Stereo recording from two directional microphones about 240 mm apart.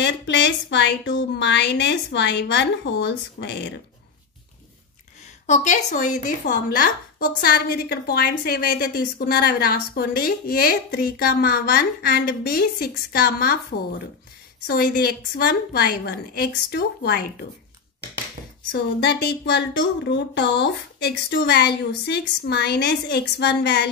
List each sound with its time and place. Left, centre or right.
0.0 s speech: left
5.2 s a woman's voice: left
18.7 s speech: left